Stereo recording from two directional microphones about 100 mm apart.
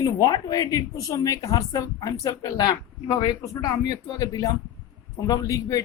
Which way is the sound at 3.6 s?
35° left (ahead or behind).